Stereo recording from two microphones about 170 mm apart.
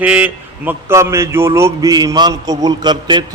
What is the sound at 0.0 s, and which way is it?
A man's voice, 10° right (ahead or behind).